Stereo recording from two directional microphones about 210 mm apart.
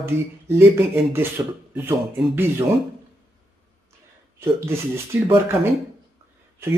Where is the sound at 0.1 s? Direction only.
10° right (ahead or behind).